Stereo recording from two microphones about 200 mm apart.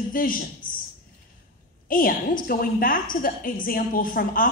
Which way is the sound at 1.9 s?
45° left (ahead or behind).